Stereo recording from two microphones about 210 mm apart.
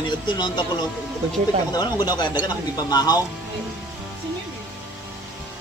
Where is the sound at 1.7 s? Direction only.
20° left (ahead or behind).